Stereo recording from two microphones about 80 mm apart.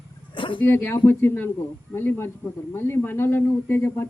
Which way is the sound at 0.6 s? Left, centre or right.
Left.